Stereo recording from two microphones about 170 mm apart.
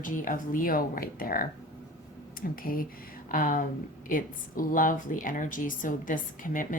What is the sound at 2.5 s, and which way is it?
A woman's voice, 60° left (ahead or behind).